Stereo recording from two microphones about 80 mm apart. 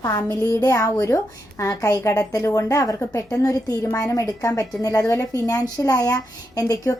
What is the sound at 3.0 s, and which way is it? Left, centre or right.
A woman's voice, left.